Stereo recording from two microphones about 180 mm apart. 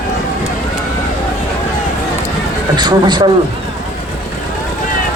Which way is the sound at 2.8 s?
25° right (ahead or behind).